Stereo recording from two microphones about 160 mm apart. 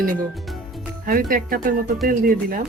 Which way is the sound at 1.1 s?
60° right (ahead or behind).